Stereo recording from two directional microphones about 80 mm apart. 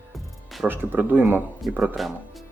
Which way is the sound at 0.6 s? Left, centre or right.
Right.